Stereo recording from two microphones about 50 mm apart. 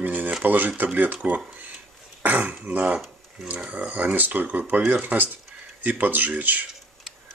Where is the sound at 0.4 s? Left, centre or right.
Right.